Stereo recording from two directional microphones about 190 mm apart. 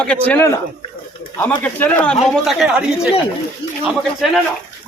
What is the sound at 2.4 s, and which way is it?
Speech, 5° right (ahead or behind).